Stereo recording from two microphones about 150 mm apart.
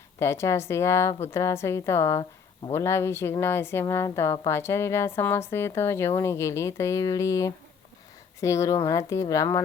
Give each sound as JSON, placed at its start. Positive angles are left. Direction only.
{"t": 0.2, "sound": "a woman's voice", "side_deg": 20}